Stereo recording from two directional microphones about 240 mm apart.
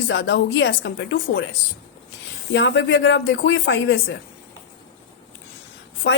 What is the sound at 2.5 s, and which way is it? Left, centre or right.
A woman's voice, left.